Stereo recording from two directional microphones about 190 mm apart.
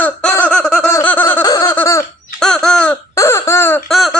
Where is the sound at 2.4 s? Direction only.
5° left (ahead or behind).